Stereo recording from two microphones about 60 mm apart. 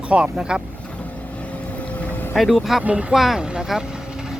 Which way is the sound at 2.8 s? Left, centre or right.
Right.